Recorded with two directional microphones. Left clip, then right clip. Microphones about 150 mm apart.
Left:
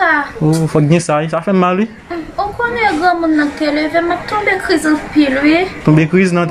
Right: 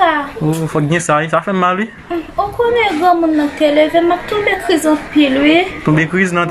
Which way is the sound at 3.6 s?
40° right (ahead or behind).